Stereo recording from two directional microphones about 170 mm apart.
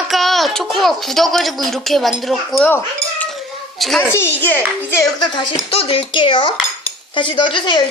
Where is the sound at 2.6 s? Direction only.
10° left (ahead or behind).